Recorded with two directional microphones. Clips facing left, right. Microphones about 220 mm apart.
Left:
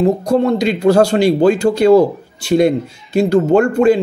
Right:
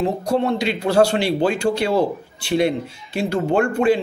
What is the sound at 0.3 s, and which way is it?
A man's voice, 40° left (ahead or behind).